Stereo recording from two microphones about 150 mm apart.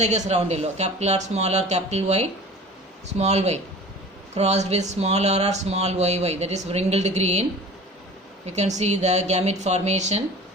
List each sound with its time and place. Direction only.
0.0 s speech: 50° right (ahead or behind)
8.4 s speech: 50° right (ahead or behind)